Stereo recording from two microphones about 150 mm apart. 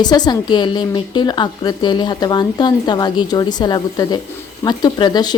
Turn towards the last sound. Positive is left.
turn(degrees=30)  # may be behind; listen again after turning